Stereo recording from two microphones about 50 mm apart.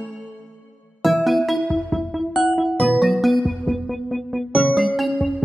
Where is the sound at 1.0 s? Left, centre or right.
Centre.